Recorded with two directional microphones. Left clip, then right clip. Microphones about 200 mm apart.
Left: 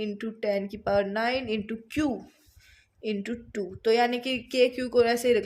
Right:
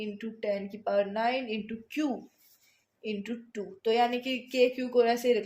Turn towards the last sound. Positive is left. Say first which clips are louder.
# left 3 dB
turn(degrees=45)  # may be behind; listen again after turning